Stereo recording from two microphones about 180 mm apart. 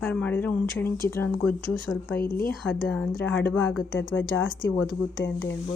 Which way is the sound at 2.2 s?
55° left (ahead or behind).